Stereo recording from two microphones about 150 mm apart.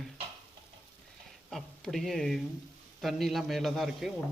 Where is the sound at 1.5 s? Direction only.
Centre (ahead or behind).